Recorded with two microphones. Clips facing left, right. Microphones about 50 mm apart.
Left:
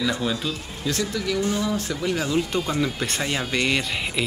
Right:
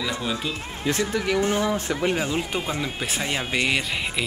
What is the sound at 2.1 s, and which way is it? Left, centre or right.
Speech, right.